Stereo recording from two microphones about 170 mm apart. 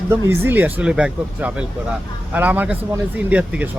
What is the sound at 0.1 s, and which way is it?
Speech, 15° right (ahead or behind).